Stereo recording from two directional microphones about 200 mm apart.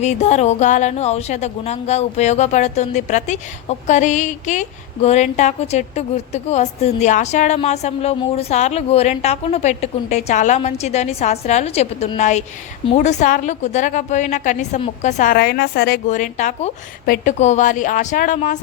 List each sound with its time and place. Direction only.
0.0 s a woman's voice: 35° left (ahead or behind); by 16.0 s 55° left (ahead or behind)
16.0 s a woman's voice: 40° left (ahead or behind)